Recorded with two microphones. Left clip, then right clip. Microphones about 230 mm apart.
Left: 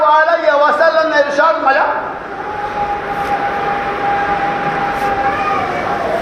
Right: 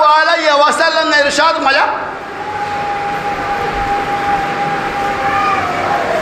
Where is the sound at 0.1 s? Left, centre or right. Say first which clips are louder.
Even; right.